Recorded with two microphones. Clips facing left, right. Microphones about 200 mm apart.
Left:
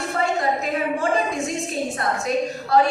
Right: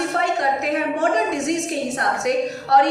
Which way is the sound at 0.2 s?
75° right (ahead or behind).